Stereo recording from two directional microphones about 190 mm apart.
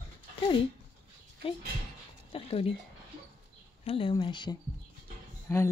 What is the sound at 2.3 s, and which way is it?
Speech, 30° left (ahead or behind).